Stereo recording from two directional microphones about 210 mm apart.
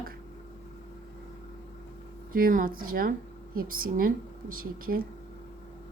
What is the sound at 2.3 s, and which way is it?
Speech, 40° right (ahead or behind).